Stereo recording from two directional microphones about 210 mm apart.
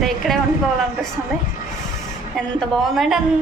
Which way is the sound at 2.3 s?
Centre (ahead or behind).